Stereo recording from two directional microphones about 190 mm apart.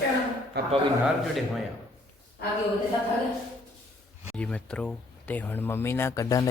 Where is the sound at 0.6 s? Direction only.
55° right (ahead or behind).